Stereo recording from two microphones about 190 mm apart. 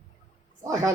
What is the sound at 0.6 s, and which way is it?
Speech, 20° right (ahead or behind).